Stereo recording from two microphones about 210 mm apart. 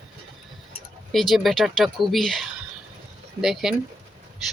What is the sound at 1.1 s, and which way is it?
Speech, centre (ahead or behind).